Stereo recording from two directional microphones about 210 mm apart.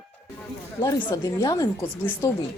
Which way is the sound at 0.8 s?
20° left (ahead or behind).